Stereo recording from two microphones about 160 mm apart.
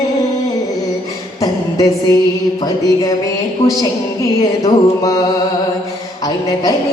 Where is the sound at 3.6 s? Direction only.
40° left (ahead or behind).